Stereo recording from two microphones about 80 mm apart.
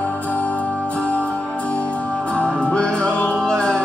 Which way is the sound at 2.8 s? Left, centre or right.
Centre.